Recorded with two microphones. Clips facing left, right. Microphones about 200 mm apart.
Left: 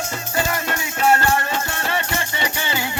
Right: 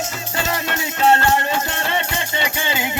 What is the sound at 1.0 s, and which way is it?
Music, 25° right (ahead or behind).